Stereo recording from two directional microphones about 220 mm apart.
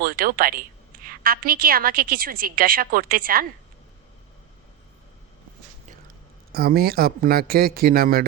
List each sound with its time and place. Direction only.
0.0 s a woman's voice: 40° right (ahead or behind)
6.5 s speech: 45° right (ahead or behind)